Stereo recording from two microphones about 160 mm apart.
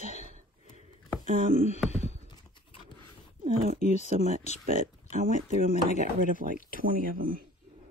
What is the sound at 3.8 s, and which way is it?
Speech, 45° left (ahead or behind).